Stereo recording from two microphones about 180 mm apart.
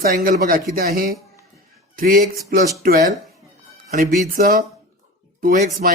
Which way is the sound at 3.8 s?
45° right (ahead or behind).